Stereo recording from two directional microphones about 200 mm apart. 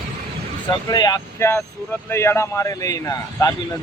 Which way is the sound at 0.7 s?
20° left (ahead or behind).